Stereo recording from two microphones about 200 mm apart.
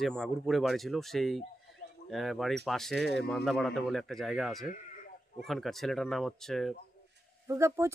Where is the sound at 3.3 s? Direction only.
Centre (ahead or behind).